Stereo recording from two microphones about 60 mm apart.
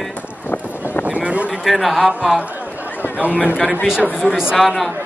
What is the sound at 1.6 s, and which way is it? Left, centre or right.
Speech, centre.